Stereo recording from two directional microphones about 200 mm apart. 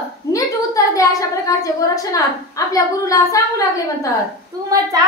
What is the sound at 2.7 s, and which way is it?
A woman's voice, 15° left (ahead or behind).